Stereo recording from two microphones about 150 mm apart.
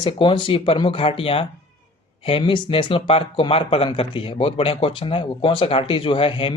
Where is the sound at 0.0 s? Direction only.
35° left (ahead or behind).